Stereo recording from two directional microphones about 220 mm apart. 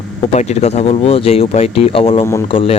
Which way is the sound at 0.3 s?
30° left (ahead or behind).